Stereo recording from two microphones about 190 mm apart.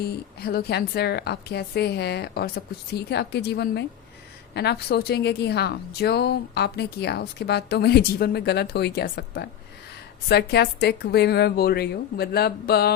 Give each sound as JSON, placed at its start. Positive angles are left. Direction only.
{"t": 0.4, "sound": "a woman's voice", "side_deg": 55}